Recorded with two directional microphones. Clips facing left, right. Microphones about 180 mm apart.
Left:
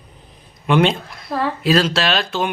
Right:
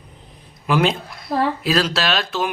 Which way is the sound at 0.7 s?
Centre (ahead or behind).